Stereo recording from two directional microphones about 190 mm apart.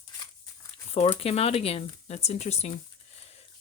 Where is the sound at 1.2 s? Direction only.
30° left (ahead or behind).